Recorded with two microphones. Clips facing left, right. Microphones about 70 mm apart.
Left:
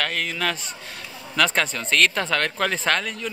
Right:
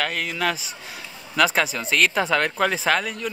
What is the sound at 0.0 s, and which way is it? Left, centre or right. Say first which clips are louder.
Speech: right 1 dB; centre.